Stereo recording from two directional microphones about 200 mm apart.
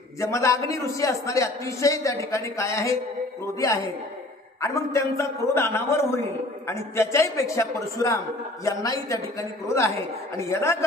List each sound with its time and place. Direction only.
0.2 s a man's voice: 15° left (ahead or behind)
9.4 s a man's voice: 15° left (ahead or behind)